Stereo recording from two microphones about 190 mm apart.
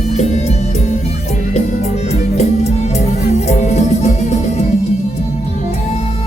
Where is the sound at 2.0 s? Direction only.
35° left (ahead or behind).